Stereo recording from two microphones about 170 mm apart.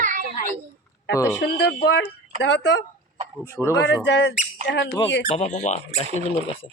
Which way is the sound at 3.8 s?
90° left.